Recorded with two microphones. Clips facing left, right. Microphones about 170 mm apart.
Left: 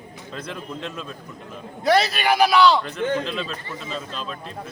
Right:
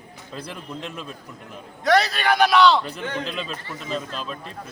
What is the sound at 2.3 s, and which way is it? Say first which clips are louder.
Speech: even; centre (ahead or behind).